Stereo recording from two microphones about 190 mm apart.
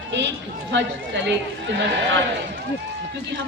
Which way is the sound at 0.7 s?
65° right (ahead or behind).